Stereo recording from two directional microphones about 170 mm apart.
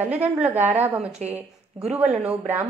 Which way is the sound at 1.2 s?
40° right (ahead or behind).